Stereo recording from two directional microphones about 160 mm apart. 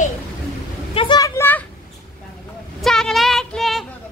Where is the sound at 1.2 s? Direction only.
20° left (ahead or behind).